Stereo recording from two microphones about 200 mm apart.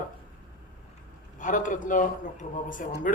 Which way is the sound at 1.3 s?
40° left (ahead or behind).